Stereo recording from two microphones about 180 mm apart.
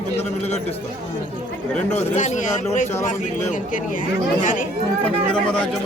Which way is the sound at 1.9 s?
40° left (ahead or behind).